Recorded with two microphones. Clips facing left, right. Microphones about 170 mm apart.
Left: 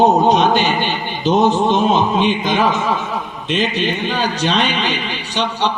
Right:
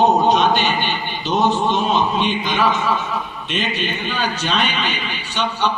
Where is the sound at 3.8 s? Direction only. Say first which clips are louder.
Left 4 dB; 35° left (ahead or behind).